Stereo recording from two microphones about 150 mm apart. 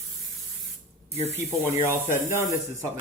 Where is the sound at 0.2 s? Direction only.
Centre (ahead or behind).